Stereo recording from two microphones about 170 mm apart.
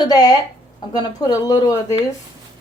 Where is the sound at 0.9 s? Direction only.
25° left (ahead or behind).